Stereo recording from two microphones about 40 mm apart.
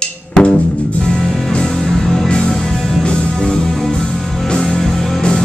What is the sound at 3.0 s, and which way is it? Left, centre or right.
Music, left.